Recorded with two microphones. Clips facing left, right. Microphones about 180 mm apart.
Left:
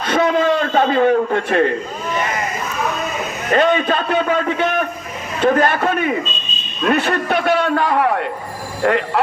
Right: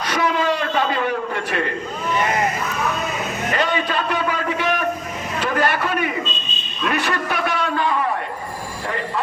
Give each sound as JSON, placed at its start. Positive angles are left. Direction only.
{"t": 0.0, "sound": "a man's voice", "side_deg": 55}
{"t": 3.5, "sound": "a man's voice", "side_deg": 50}